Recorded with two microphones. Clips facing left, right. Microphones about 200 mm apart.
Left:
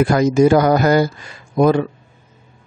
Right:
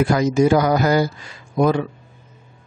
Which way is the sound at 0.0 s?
50° left (ahead or behind).